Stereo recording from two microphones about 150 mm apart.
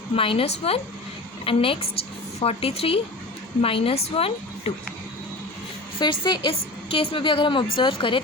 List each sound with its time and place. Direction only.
0.2 s a woman's voice: 40° left (ahead or behind)
6.0 s a woman's voice: 30° left (ahead or behind)